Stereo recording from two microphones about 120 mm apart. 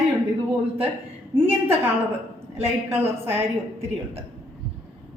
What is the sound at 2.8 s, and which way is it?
A woman's voice, 20° right (ahead or behind).